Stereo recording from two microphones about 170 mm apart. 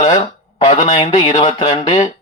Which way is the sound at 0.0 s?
35° left (ahead or behind).